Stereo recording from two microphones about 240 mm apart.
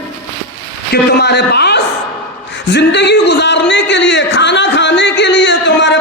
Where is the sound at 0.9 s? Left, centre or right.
Left.